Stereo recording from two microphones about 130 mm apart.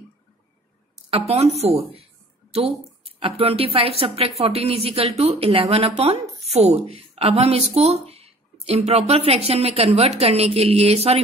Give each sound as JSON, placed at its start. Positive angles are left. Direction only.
{"t": 1.1, "sound": "speech", "side_deg": -55}
{"t": 6.5, "sound": "speech", "side_deg": -55}